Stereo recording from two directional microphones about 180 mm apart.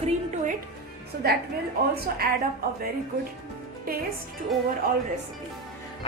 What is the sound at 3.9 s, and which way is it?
Speech, 55° right (ahead or behind).